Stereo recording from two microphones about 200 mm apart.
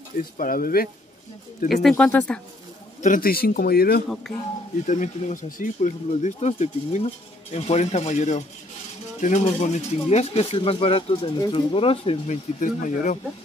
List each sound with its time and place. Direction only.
0.4 s a man's voice: 45° left (ahead or behind)
1.7 s speech: centre (ahead or behind)
3.0 s a man's voice: 45° left (ahead or behind)
4.8 s speech: 35° left (ahead or behind)